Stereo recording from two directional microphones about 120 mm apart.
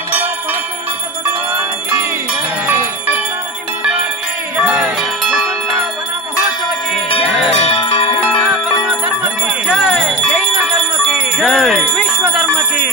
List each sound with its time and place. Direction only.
2.6 s bell: 15° right (ahead or behind)
4.6 s music: 5° right (ahead or behind)
5.3 s bell: centre (ahead or behind)
7.1 s music: 50° left (ahead or behind)
8.8 s music: 10° right (ahead or behind)
9.8 s bell: centre (ahead or behind)
11.3 s music: centre (ahead or behind)